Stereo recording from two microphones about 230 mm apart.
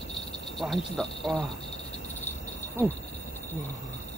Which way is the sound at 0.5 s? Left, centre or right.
Centre.